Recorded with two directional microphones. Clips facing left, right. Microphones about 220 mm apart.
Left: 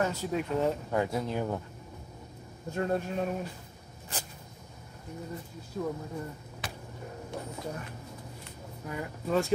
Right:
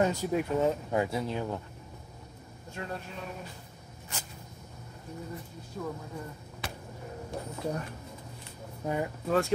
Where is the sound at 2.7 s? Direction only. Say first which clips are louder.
Left 9 dB; 45° left (ahead or behind).